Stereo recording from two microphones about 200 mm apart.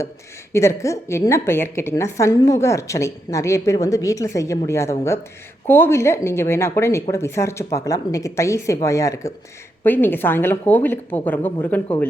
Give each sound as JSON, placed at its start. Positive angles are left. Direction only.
{"t": 0.5, "sound": "a woman's voice", "side_deg": 15}